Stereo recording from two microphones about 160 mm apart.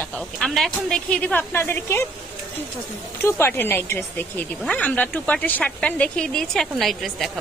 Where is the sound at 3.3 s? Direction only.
15° left (ahead or behind).